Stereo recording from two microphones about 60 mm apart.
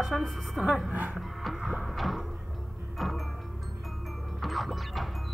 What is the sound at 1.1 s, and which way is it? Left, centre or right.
Music, centre.